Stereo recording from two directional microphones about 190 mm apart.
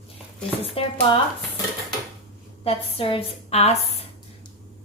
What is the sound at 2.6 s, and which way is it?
A woman's voice, 30° left (ahead or behind).